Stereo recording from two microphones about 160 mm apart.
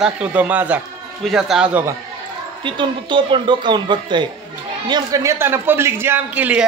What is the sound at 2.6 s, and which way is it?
A man's voice, 30° right (ahead or behind).